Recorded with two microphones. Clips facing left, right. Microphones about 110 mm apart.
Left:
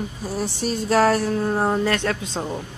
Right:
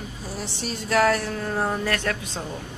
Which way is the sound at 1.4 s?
25° left (ahead or behind).